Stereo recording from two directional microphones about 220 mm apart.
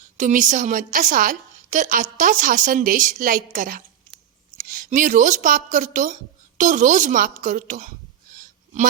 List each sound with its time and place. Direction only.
0.2 s a woman's voice: 35° right (ahead or behind)